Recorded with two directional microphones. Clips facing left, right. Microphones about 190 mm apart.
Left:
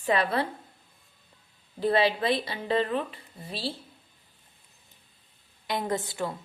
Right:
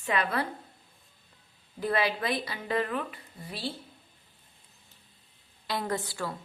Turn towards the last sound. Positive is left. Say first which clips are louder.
# left 3 dB
turn(degrees=20)  # may be behind; listen again after turning